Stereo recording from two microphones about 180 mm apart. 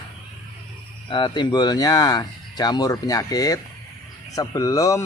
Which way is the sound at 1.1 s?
25° left (ahead or behind).